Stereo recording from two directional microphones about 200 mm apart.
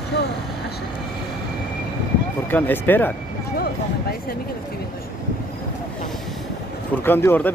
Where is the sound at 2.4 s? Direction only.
10° left (ahead or behind).